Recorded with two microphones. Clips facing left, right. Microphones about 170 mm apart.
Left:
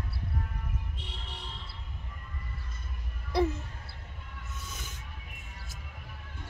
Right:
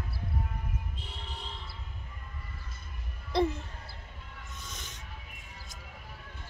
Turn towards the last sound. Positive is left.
turn(degrees=5)  # may be behind; listen again after turning